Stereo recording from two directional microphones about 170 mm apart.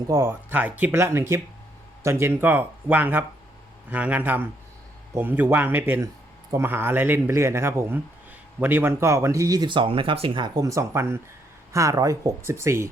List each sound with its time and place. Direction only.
0.1 s speech: 15° right (ahead or behind)